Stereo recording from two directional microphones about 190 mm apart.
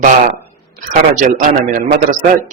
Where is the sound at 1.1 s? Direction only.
45° right (ahead or behind).